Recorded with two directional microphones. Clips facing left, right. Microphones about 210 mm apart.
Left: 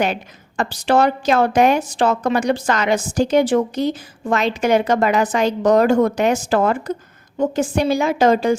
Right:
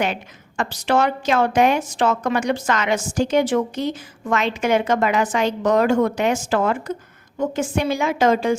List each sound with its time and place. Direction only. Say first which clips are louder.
0.0 s a woman's voice: left 3 dB; 35° left (ahead or behind)